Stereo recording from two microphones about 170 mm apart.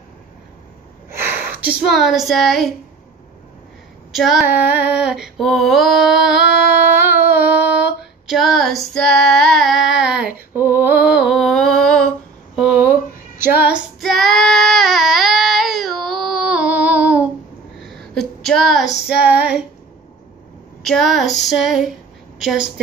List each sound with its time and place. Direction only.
1.1 s a sound: 10° right (ahead or behind)
1.7 s female singing: 5° right (ahead or behind)
4.1 s female singing: centre (ahead or behind)
4.5 s female singing: 10° right (ahead or behind)
12.5 s a sound: 5° right (ahead or behind)
13.4 s child singing: 10° right (ahead or behind)
17.8 s a sound: centre (ahead or behind)
18.4 s female singing: centre (ahead or behind)
20.8 s female singing: centre (ahead or behind)